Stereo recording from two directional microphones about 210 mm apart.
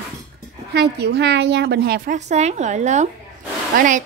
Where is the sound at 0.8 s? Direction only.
55° right (ahead or behind).